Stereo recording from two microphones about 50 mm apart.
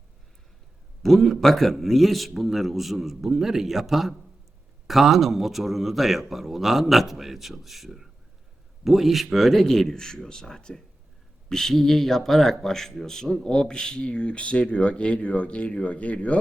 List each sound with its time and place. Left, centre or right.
1.0 s a man's voice: centre; by 16.4 s left